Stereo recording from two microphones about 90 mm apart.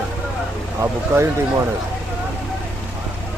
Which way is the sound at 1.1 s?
30° right (ahead or behind).